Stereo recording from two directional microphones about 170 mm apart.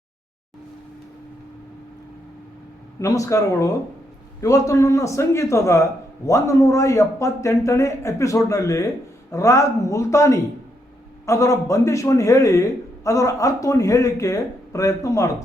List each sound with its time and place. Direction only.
3.0 s a man's voice: 20° left (ahead or behind)